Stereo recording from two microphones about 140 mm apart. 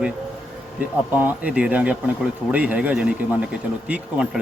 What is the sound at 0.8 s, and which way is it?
Speech, 10° right (ahead or behind).